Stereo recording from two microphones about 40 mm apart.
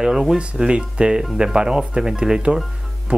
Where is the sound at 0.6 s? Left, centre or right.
Right.